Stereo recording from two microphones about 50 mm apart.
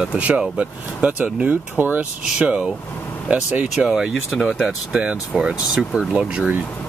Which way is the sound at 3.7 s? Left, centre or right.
Centre.